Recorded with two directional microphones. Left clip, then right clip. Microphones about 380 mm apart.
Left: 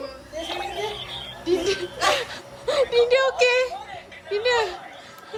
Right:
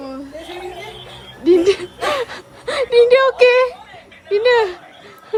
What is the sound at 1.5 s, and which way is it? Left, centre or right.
Speech, centre.